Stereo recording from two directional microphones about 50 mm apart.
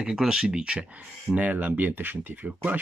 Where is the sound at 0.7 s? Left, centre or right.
Right.